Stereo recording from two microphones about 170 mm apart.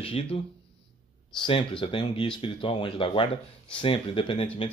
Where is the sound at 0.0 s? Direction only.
30° left (ahead or behind).